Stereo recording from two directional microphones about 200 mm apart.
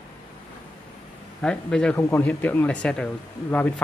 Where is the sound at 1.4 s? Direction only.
5° left (ahead or behind).